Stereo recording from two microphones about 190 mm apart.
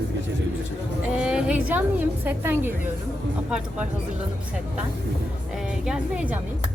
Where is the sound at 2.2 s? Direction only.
10° right (ahead or behind).